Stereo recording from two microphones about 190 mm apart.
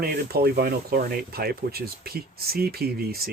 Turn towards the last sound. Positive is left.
turn(degrees=-55)  # may be behind; listen again after turning